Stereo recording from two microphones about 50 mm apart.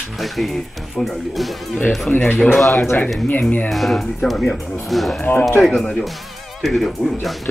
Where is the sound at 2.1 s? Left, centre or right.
Left.